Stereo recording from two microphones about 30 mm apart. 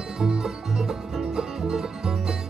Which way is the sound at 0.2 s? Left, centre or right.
Right.